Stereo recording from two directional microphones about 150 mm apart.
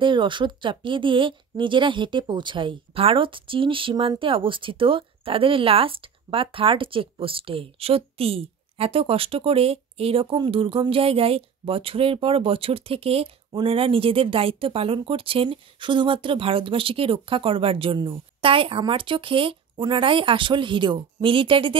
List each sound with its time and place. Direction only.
0.0 s speech: 30° right (ahead or behind)